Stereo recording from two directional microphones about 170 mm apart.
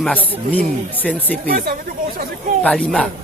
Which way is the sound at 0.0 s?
10° left (ahead or behind).